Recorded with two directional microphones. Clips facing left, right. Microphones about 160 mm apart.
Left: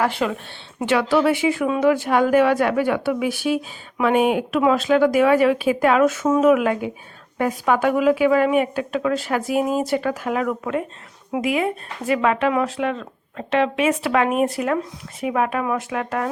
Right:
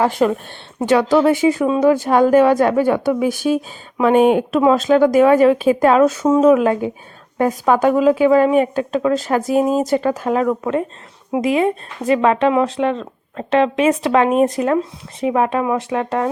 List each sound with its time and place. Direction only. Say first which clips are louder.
0.1 s speech: right 7 dB; 45° right (ahead or behind)